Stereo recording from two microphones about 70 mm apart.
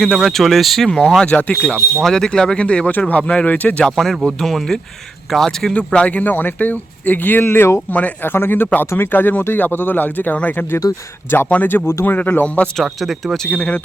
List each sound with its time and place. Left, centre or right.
0.0 s speech: centre
0.9 s speech: centre
3.8 s speech: centre
5.7 s speech: centre
12.7 s speech: centre